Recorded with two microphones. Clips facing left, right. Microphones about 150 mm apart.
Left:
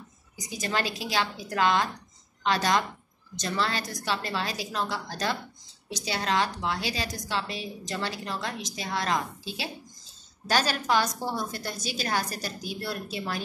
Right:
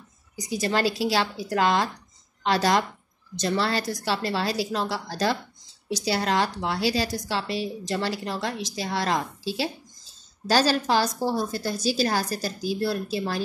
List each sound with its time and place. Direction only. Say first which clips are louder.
0.5 s a woman's voice: right 6 dB; 30° right (ahead or behind)